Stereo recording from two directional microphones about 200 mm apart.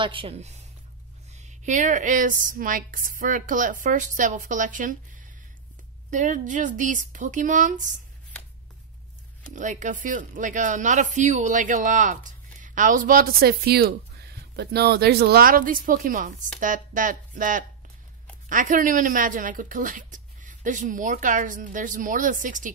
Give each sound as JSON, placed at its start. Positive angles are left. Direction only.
{"t": 0.0, "sound": "speech", "side_deg": -25}
{"t": 6.0, "sound": "speech", "side_deg": -40}
{"t": 9.6, "sound": "speech", "side_deg": -35}